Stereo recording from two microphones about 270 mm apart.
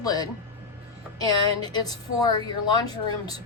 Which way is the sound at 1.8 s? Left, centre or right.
Centre.